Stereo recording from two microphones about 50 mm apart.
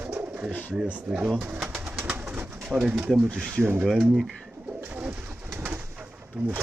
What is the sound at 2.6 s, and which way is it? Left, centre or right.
Speech, centre.